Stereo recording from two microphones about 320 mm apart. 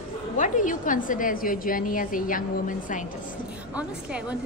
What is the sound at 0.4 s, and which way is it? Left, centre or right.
A woman's voice, left.